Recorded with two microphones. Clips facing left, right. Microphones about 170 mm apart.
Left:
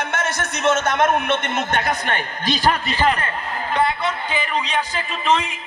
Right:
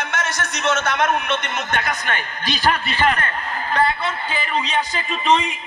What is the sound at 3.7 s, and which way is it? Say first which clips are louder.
A man's voice: even; 15° left (ahead or behind).